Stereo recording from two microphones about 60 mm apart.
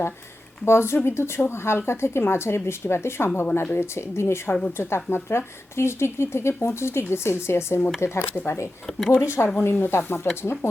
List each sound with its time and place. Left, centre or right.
0.6 s speech: left
8.9 s speech: centre
9.1 s speech: left